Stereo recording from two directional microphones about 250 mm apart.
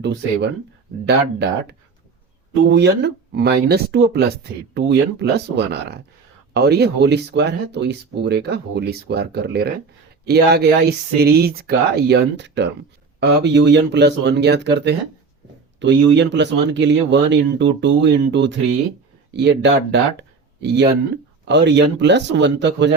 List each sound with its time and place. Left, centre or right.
0.0 s speech: right